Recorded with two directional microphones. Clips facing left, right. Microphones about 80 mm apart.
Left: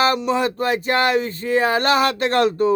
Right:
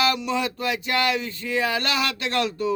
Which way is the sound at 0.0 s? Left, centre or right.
Left.